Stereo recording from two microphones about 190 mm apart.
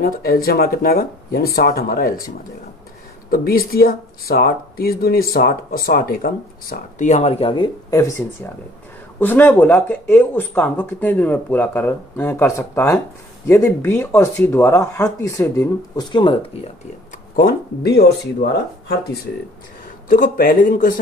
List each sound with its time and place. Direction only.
0.0 s speech: 50° left (ahead or behind); by 16.7 s 25° left (ahead or behind)
17.4 s speech: 55° left (ahead or behind)
20.1 s speech: 45° left (ahead or behind)